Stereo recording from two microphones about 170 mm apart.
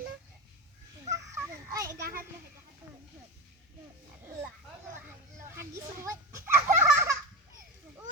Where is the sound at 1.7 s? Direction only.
20° right (ahead or behind).